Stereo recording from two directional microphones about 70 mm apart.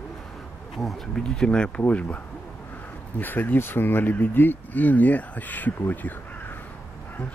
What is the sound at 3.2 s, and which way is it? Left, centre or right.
Speech, left.